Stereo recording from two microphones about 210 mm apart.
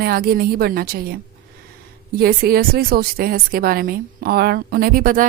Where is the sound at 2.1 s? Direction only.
45° right (ahead or behind).